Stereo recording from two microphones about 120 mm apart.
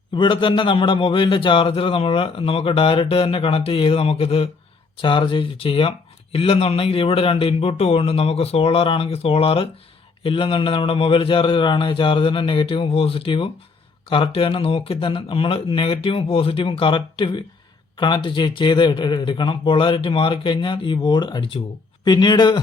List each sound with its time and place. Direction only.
0.1 s a man's voice: 45° left (ahead or behind)